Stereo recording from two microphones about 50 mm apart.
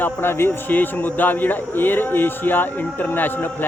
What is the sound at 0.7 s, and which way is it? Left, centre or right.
A man's voice, left.